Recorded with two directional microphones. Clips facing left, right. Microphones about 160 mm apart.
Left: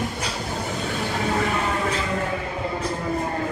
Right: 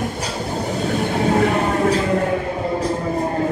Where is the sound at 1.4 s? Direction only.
50° right (ahead or behind).